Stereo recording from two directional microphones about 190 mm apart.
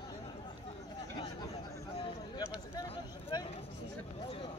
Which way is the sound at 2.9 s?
30° left (ahead or behind).